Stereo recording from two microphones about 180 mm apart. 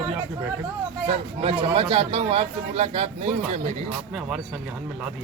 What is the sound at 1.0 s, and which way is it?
A man's voice, 35° right (ahead or behind).